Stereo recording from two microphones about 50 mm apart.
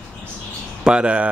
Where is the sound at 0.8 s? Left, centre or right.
Centre.